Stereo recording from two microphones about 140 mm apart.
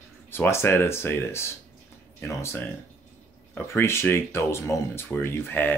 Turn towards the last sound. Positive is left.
turn(degrees=15)  # may be behind; listen again after turning